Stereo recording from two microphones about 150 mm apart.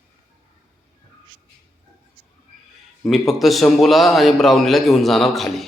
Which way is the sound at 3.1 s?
Centre (ahead or behind).